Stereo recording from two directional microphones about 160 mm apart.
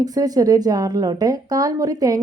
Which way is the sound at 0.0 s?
25° right (ahead or behind).